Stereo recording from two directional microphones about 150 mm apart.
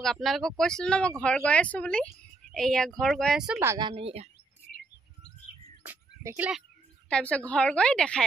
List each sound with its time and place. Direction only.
0.0 s a woman's voice: centre (ahead or behind)
3.6 s speech: 25° right (ahead or behind)
3.9 s speech: 40° right (ahead or behind)
5.9 s music: 10° right (ahead or behind)
7.1 s a woman's voice: 5° left (ahead or behind)